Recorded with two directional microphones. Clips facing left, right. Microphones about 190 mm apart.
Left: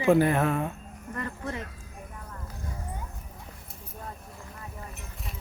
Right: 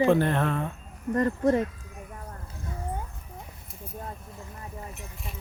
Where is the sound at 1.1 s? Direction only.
40° right (ahead or behind).